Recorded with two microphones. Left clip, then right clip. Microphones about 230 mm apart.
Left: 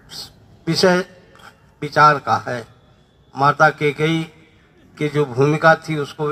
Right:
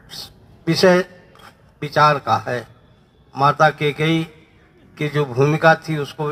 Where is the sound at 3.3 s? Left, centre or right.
Right.